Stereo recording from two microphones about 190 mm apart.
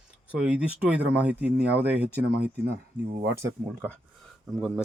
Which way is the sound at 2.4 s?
60° right (ahead or behind).